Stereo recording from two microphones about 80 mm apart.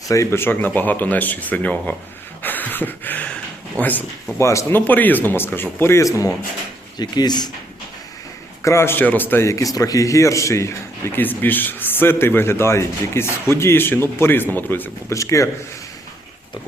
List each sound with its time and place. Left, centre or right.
0.1 s speech: left; by 2.0 s centre
2.4 s a sound: left
3.8 s speech: left
4.4 s speech: left
4.7 s speech: left
7.0 s speech: left
8.6 s speech: left
9.0 s speech: left
9.4 s speech: left
15.1 s speech: left